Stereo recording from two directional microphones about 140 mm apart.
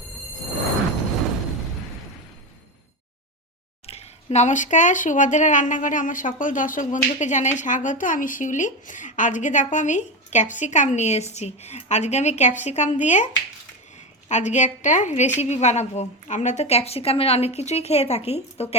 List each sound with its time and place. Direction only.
3.8 s speech: 50° left (ahead or behind)
14.3 s a woman's voice: 55° left (ahead or behind)